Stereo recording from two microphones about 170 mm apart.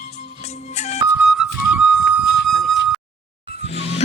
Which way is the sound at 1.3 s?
Centre (ahead or behind).